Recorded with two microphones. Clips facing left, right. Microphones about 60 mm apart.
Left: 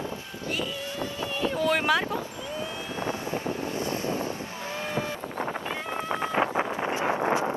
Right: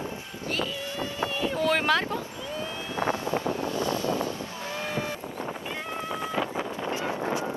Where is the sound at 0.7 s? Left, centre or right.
Left.